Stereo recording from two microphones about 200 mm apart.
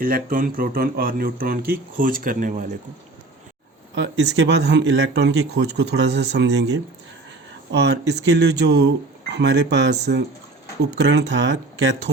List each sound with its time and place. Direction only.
0.0 s speech: 45° right (ahead or behind)
3.9 s speech: 60° right (ahead or behind)